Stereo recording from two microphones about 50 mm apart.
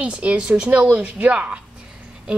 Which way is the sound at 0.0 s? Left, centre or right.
Right.